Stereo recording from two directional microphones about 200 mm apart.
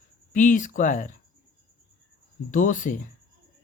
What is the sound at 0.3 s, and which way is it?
Speech, 40° left (ahead or behind).